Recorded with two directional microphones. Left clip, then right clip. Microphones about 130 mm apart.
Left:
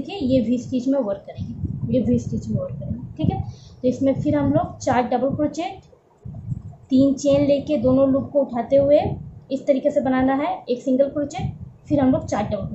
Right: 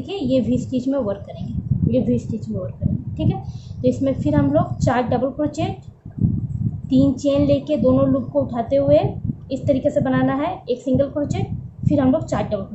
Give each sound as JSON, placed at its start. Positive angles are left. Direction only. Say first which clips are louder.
{"t": 0.1, "sound": "a woman's voice", "louder": "right 1 dB", "side_deg": -15}
{"t": 6.9, "sound": "a woman's voice", "louder": "left 1 dB", "side_deg": -15}